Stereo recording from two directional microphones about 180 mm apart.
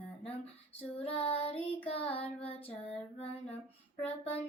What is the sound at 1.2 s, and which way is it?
Child singing, 35° left (ahead or behind).